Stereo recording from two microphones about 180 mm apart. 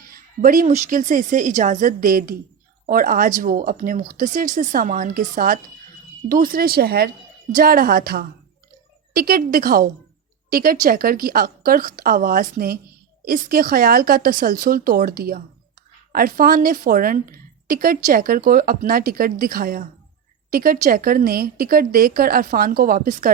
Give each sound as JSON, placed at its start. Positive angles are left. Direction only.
{"t": 0.0, "sound": "a woman's voice", "side_deg": -50}